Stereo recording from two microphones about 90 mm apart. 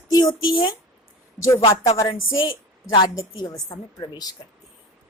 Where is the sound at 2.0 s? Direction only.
70° left (ahead or behind).